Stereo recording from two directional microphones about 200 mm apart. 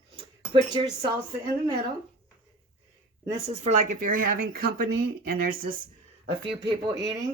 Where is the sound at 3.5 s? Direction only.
35° right (ahead or behind).